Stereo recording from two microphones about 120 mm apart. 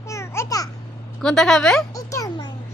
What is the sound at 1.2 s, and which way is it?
Speech, 5° left (ahead or behind).